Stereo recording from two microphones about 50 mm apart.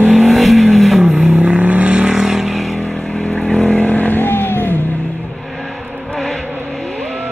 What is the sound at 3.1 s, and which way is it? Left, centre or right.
Vehicle, centre.